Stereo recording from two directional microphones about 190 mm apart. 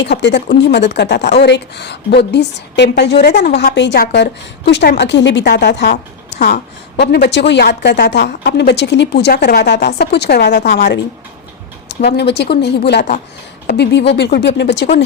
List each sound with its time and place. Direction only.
0.0 s a woman's voice: 65° left (ahead or behind)